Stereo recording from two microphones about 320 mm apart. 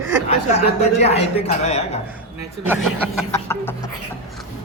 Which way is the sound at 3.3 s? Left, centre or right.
Centre.